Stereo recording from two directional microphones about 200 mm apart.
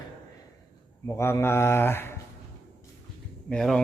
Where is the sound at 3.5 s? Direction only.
5° left (ahead or behind).